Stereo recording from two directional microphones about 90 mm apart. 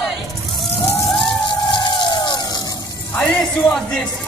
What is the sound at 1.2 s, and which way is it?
Emergency vehicle, 60° left (ahead or behind).